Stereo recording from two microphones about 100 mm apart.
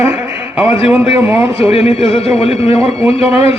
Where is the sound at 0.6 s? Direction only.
65° left (ahead or behind).